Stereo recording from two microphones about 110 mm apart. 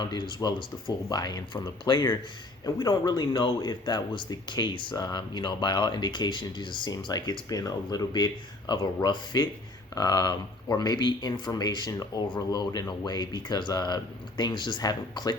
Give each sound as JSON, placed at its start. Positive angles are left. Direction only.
{"t": 0.0, "sound": "speech", "side_deg": 45}